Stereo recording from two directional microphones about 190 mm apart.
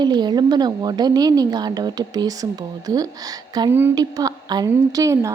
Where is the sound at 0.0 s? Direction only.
20° right (ahead or behind).